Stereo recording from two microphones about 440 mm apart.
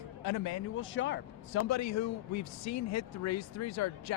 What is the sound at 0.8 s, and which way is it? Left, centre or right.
A man's voice, left.